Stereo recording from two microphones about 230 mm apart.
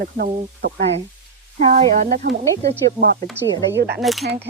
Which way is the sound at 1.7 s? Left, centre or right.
Right.